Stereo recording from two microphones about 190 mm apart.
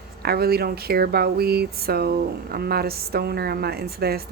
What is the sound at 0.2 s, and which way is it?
Speech, 55° right (ahead or behind).